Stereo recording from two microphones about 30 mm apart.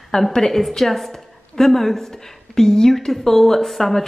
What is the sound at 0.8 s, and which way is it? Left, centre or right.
A woman's voice, centre.